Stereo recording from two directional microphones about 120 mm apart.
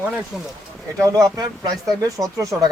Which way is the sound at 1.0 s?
30° right (ahead or behind).